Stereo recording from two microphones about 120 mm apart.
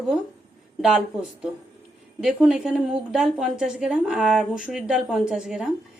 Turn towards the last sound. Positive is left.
turn(degrees=-5)  # may be behind; listen again after turning